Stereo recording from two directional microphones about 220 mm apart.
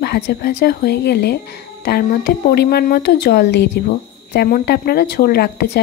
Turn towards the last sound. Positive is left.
turn(degrees=45)  # may be behind; listen again after turning